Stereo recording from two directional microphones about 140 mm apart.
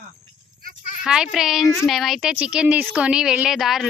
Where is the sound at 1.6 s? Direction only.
20° left (ahead or behind).